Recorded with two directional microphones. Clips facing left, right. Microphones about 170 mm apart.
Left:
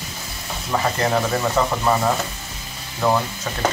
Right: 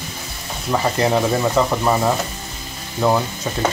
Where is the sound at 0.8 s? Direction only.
15° right (ahead or behind).